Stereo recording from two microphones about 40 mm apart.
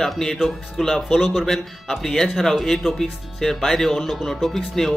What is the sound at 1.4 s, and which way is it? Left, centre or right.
Speech, centre.